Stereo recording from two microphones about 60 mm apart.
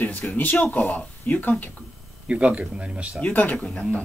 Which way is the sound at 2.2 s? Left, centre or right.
Centre.